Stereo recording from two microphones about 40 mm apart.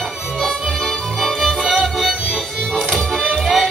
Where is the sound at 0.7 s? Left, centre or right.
Centre.